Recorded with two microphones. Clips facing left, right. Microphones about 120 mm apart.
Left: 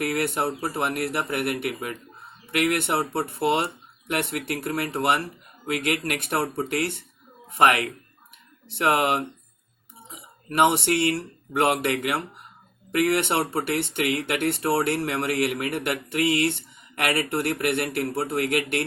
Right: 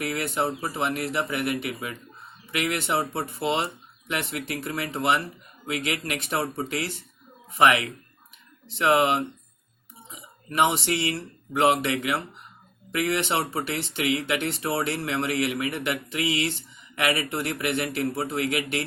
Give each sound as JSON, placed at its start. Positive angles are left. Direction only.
{"t": 0.0, "sound": "speech", "side_deg": 55}
{"t": 4.1, "sound": "speech", "side_deg": 55}
{"t": 10.6, "sound": "speech", "side_deg": 55}